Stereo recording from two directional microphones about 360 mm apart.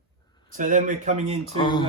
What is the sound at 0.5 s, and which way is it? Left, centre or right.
Speech, right.